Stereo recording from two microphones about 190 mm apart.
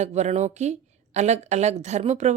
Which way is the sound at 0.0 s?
35° right (ahead or behind).